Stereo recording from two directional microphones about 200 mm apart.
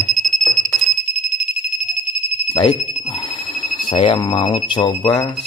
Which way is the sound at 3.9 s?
25° left (ahead or behind).